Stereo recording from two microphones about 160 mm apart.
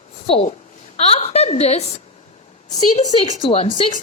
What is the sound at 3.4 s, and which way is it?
Speech, 35° left (ahead or behind).